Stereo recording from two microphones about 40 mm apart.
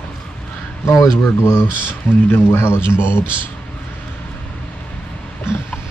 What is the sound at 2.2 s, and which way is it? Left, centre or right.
Speech, left.